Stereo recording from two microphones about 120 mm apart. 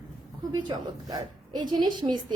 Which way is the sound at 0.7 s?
40° right (ahead or behind).